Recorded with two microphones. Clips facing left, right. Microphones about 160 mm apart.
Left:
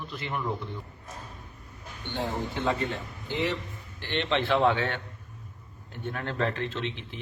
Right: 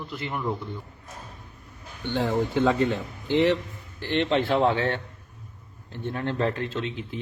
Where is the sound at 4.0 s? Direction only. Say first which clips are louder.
Right 5 dB; 40° right (ahead or behind).